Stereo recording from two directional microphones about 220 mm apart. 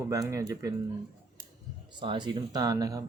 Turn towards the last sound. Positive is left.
turn(degrees=-15)  # may be behind; listen again after turning